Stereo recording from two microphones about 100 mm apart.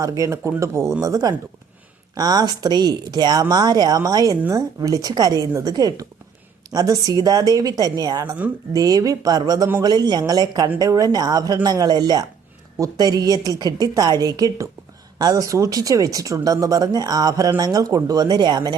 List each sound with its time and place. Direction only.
0.0 s speech: 35° right (ahead or behind)